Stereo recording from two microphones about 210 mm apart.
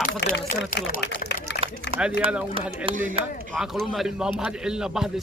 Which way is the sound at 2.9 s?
40° right (ahead or behind).